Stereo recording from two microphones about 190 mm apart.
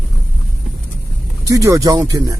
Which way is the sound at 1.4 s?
15° right (ahead or behind).